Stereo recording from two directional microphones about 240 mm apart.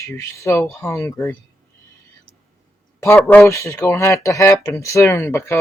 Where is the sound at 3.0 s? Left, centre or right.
Centre.